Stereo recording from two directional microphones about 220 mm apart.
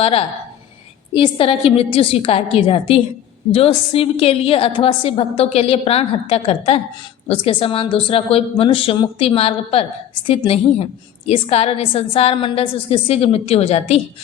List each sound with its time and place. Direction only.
0.0 s a woman's voice: 25° left (ahead or behind)